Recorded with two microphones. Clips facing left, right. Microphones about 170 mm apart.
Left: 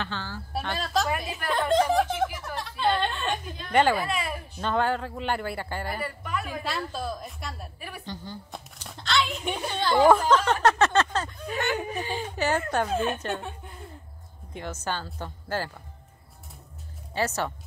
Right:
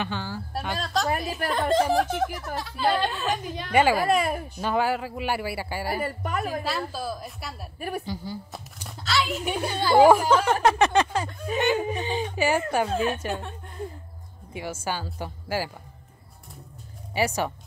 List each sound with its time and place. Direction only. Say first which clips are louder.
0.0 s speech: right 3 dB; 15° right (ahead or behind)
0.5 s speech: left 2 dB; centre (ahead or behind)
3.4 s a woman's voice: right 6 dB; 75° right (ahead or behind)
3.7 s speech: right 1 dB; 5° right (ahead or behind)
4.0 s speech: right 7 dB; 45° right (ahead or behind)
4.6 s speech: even; 10° right (ahead or behind)
6.0 s speech: right 3 dB; 45° right (ahead or behind)
6.6 s speech: right 2 dB; 5° right (ahead or behind)
14.5 s speech: right 2 dB; 10° right (ahead or behind)
17.1 s speech: right 3 dB; 10° right (ahead or behind)